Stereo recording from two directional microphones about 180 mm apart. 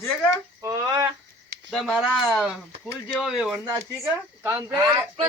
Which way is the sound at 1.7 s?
Centre (ahead or behind).